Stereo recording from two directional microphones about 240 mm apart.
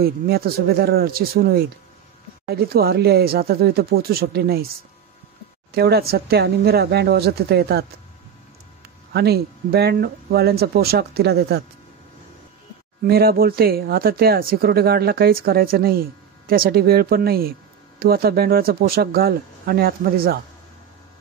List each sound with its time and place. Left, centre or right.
0.0 s speech: right
5.7 s speech: right
9.1 s speech: right
13.0 s speech: right